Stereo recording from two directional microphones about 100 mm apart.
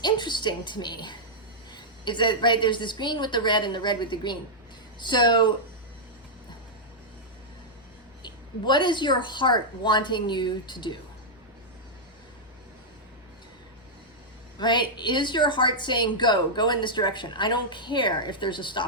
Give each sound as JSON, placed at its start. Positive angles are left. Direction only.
{"t": 0.0, "sound": "a woman's voice", "side_deg": 50}
{"t": 8.2, "sound": "a woman's voice", "side_deg": 50}
{"t": 14.6, "sound": "a woman's voice", "side_deg": 50}